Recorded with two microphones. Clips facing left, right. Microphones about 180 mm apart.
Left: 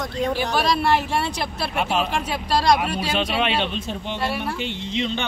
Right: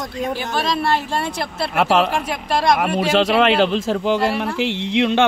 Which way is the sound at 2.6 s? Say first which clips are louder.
Right 5 dB; 60° right (ahead or behind).